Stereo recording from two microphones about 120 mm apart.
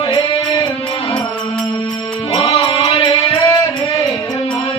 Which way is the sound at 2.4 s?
30° left (ahead or behind).